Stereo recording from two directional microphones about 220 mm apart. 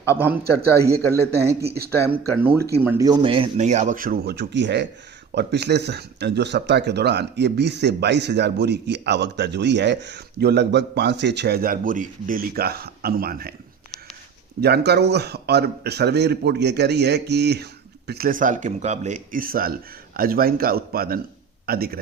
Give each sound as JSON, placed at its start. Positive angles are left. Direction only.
{"t": 0.0, "sound": "a man's voice", "side_deg": 10}
{"t": 0.9, "sound": "a man's voice", "side_deg": -15}
{"t": 1.6, "sound": "speech", "side_deg": -45}
{"t": 2.4, "sound": "speech", "side_deg": -10}
{"t": 14.6, "sound": "speech", "side_deg": -50}